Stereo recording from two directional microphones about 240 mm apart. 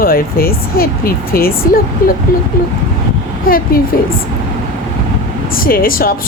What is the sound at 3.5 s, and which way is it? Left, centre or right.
Speech, left.